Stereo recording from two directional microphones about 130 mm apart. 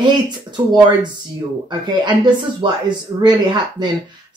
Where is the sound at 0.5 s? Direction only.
35° right (ahead or behind).